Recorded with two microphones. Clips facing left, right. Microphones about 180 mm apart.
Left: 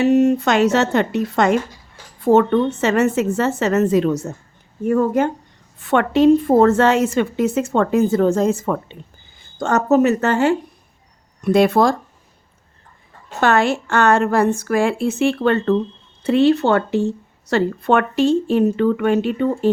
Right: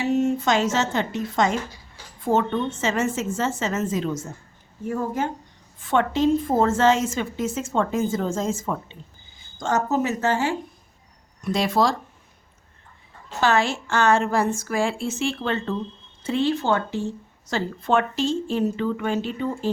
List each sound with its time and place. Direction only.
0.0 s a woman's voice: 70° left (ahead or behind)
13.4 s a woman's voice: 60° left (ahead or behind)